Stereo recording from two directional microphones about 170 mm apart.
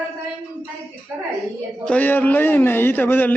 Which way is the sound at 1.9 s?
10° left (ahead or behind).